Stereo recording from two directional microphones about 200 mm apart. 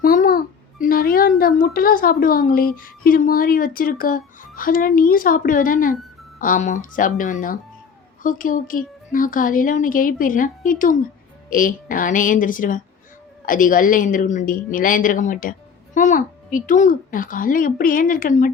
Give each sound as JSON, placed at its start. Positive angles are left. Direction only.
{"t": 0.0, "sound": "a child's voice", "side_deg": 45}